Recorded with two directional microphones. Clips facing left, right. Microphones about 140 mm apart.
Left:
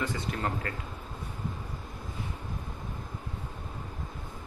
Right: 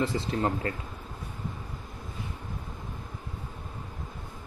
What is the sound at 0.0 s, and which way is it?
Speech, 25° right (ahead or behind).